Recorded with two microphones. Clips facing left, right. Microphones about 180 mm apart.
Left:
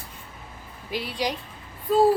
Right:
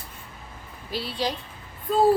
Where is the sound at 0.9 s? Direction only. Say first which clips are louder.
Even; 15° left (ahead or behind).